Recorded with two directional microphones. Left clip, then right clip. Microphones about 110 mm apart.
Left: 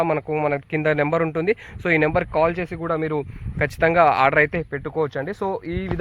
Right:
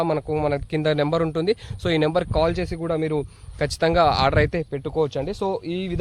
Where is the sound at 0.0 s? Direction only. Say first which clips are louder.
Left 1 dB; centre (ahead or behind).